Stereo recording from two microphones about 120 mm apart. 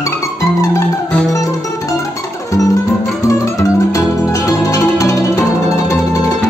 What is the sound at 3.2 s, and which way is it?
Music, 25° left (ahead or behind).